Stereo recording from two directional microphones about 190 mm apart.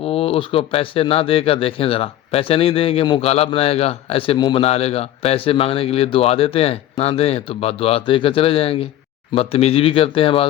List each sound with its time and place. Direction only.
0.0 s speech: 30° left (ahead or behind)